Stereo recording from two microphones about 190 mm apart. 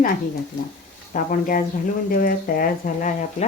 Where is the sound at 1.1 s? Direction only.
45° left (ahead or behind).